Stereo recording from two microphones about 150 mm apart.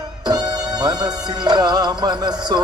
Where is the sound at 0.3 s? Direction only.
25° right (ahead or behind).